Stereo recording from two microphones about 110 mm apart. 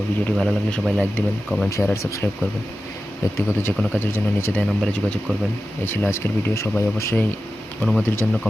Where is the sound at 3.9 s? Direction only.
20° left (ahead or behind).